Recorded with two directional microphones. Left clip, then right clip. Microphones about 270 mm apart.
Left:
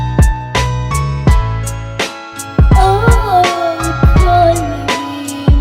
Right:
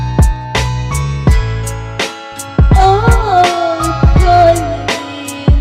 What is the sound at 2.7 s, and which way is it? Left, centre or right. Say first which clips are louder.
Music: right 2 dB; right.